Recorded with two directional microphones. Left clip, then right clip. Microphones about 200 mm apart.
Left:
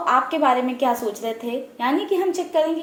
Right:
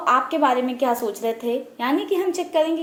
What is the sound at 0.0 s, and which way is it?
A woman's voice, 30° right (ahead or behind).